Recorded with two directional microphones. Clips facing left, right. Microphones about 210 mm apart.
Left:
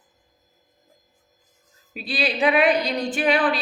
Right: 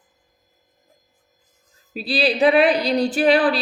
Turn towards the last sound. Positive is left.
turn(degrees=-35)  # may be behind; listen again after turning